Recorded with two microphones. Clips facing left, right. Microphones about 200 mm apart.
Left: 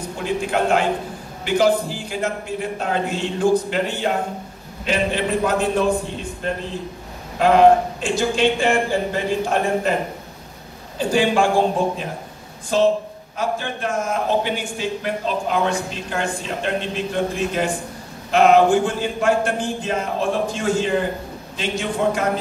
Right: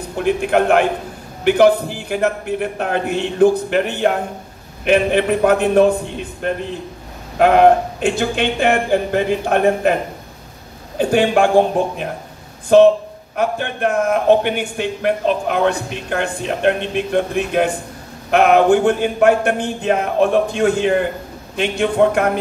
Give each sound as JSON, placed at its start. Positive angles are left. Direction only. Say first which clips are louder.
{"t": 0.2, "sound": "a man's voice", "louder": "right 6 dB", "side_deg": -60}
{"t": 11.0, "sound": "a man's voice", "louder": "right 4 dB", "side_deg": -60}